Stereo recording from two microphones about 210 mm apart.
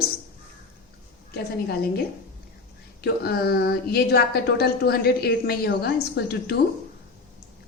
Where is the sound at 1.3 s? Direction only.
50° left (ahead or behind).